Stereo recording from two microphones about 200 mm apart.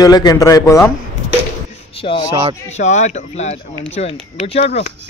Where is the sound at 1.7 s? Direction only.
25° left (ahead or behind).